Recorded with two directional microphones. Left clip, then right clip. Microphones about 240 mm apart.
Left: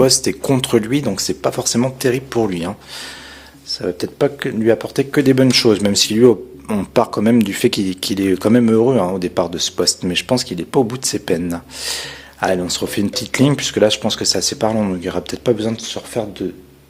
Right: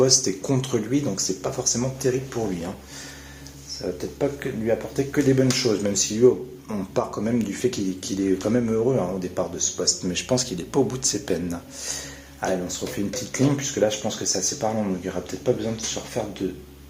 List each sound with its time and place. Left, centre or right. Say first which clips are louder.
0.0 s speech: left 6 dB; left